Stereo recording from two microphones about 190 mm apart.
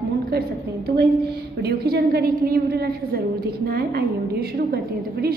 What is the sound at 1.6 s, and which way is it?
A woman's voice, 55° right (ahead or behind).